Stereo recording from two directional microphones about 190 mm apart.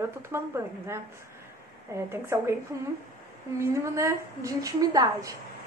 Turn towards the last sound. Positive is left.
turn(degrees=-20)  # may be behind; listen again after turning